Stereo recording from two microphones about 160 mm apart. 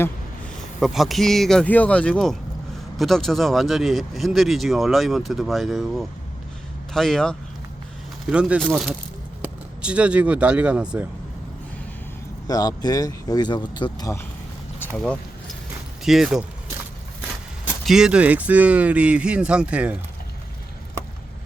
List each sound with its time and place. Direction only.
0.8 s speech: centre (ahead or behind)
12.5 s speech: 25° left (ahead or behind)
14.8 s speech: 5° left (ahead or behind)
17.8 s speech: 5° right (ahead or behind)